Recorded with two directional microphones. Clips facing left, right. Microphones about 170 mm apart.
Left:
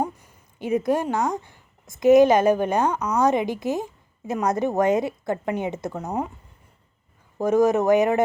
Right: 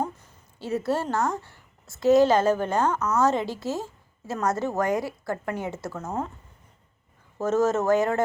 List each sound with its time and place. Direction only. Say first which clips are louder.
0.0 s speech: left 3 dB; 15° left (ahead or behind)
7.3 s speech: left 4 dB; 15° left (ahead or behind)